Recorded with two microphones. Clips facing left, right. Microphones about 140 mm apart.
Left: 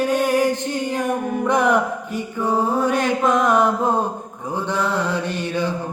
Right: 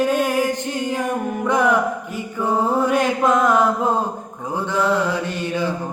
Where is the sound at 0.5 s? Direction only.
15° right (ahead or behind).